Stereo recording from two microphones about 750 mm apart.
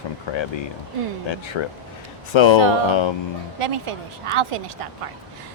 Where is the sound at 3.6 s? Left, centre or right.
Right.